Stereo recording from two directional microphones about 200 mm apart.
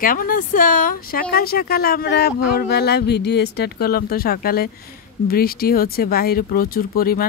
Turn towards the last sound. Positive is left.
turn(degrees=50)  # may be behind; listen again after turning